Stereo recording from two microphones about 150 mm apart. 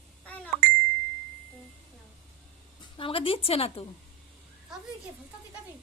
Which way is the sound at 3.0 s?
35° left (ahead or behind).